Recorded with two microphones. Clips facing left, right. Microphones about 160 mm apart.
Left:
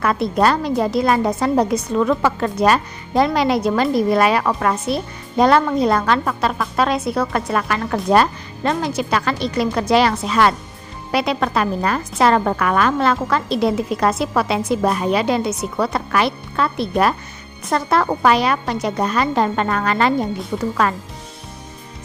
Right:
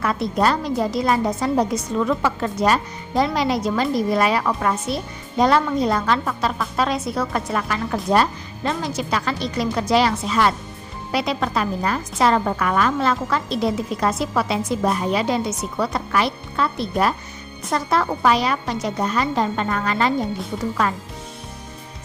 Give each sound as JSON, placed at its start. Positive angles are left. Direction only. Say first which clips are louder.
{"t": 0.0, "sound": "a woman's voice", "louder": "left 3 dB", "side_deg": 65}